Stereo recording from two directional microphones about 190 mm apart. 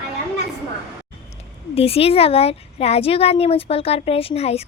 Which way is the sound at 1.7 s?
30° left (ahead or behind).